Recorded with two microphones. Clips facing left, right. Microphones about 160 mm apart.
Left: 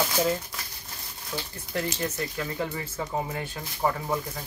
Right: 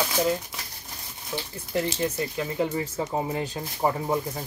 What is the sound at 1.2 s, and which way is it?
Speech, 20° right (ahead or behind).